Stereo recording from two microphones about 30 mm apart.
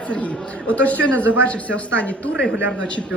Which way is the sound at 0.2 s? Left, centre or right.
Left.